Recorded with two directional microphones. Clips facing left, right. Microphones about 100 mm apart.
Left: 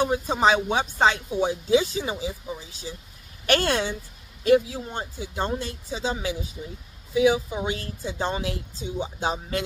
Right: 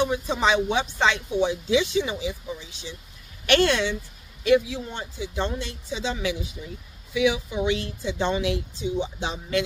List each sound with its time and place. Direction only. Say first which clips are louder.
0.0 s speech: left 2 dB; 40° left (ahead or behind)